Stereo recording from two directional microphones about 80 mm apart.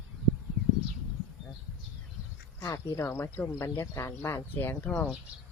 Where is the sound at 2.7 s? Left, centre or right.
Left.